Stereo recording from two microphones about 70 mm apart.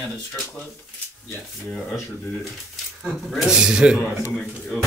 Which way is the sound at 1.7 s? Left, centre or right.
Centre.